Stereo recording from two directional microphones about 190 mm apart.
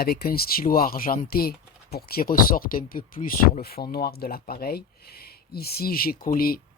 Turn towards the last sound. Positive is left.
turn(degrees=50)  # may be behind; listen again after turning